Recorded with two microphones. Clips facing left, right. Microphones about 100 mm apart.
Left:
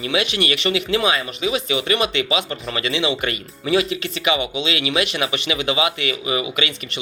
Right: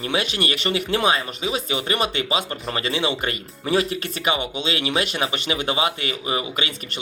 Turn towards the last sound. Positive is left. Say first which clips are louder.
# left 3 dB
turn(degrees=-40)  # may be behind; listen again after turning